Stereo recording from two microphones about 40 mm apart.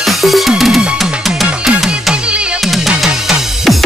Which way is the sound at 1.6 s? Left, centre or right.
Centre.